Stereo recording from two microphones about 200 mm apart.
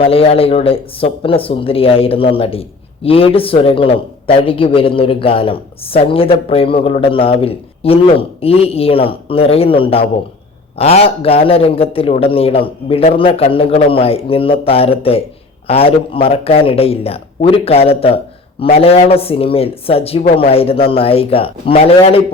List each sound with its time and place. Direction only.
0.0 s speech: 30° left (ahead or behind)